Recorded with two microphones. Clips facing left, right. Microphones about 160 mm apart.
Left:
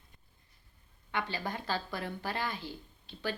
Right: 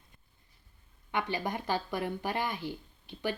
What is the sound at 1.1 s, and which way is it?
Speech, 15° right (ahead or behind).